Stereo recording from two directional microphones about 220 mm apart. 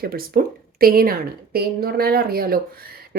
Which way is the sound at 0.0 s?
40° right (ahead or behind).